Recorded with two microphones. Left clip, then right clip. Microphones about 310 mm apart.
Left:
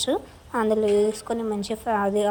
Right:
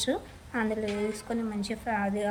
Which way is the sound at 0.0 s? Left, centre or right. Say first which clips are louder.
Left 5 dB; centre.